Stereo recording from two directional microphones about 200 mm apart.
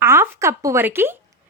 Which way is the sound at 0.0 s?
15° right (ahead or behind).